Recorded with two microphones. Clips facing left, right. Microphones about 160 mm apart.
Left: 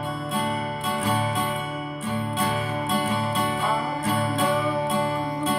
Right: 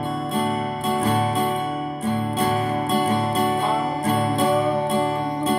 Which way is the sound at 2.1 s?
40° right (ahead or behind).